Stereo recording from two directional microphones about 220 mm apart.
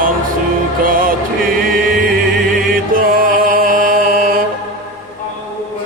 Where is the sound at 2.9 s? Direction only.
40° right (ahead or behind).